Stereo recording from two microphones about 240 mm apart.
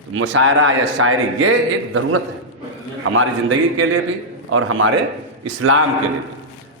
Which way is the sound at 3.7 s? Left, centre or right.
Right.